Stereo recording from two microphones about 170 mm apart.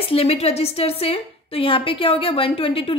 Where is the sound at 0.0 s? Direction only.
35° left (ahead or behind).